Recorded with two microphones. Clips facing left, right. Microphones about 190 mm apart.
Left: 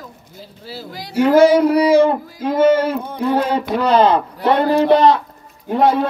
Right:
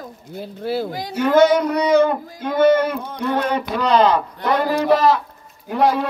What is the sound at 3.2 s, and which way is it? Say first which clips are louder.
Speech: left 3 dB; 30° left (ahead or behind).